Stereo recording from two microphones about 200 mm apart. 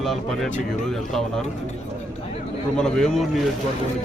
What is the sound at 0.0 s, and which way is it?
A man's voice, centre (ahead or behind).